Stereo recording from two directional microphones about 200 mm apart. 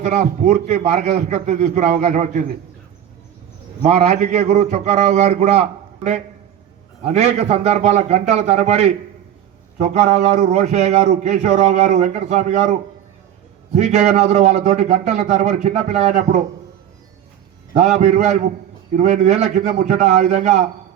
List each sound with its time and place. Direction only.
0.0 s a man's voice: 35° right (ahead or behind)
3.8 s a man's voice: 35° right (ahead or behind)
13.7 s a man's voice: 35° right (ahead or behind)
17.7 s a man's voice: 35° right (ahead or behind)